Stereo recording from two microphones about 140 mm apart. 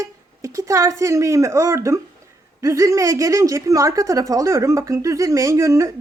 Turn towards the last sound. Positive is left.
turn(degrees=-20)  # may be behind; listen again after turning